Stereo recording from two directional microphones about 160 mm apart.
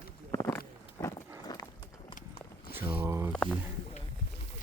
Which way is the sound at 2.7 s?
15° right (ahead or behind).